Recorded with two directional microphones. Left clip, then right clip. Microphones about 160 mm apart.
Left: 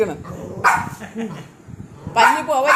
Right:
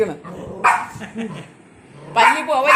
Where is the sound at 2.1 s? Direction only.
10° left (ahead or behind).